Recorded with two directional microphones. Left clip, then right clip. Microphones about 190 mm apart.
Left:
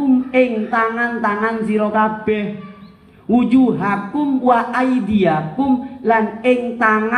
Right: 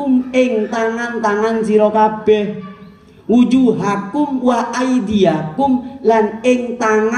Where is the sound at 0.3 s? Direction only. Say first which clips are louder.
Right 1 dB; 55° right (ahead or behind).